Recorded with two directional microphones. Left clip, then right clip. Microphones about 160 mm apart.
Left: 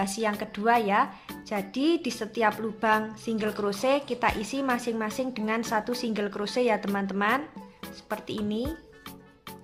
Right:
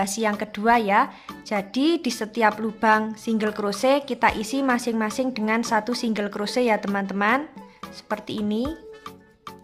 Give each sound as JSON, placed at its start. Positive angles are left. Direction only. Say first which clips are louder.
{"t": 0.0, "sound": "speech", "louder": "right 4 dB", "side_deg": -25}